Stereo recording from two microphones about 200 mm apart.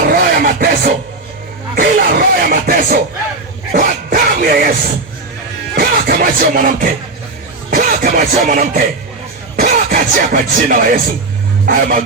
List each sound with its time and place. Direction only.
0.1 s a sound: 50° right (ahead or behind)
1.7 s music: 45° right (ahead or behind)
5.7 s music: 50° right (ahead or behind)
9.6 s speech: 40° right (ahead or behind)
11.6 s vehicle: 45° right (ahead or behind)